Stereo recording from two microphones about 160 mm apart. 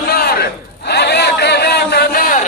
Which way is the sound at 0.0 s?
75° left (ahead or behind).